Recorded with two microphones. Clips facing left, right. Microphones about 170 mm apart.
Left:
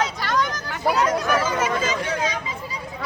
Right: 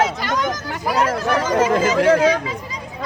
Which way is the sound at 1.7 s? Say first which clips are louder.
Right 10 dB; 90° right.